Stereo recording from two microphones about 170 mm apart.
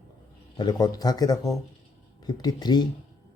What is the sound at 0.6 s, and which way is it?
Speech, 25° left (ahead or behind).